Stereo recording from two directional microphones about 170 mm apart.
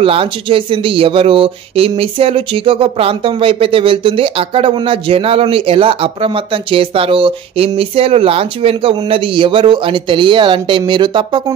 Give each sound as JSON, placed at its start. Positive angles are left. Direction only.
{"t": 0.0, "sound": "speech", "side_deg": -35}